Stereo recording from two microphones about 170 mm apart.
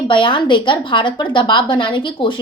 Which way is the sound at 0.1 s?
30° left (ahead or behind).